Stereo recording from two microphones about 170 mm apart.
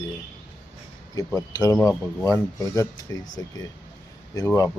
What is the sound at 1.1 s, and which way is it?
Speech, 20° left (ahead or behind).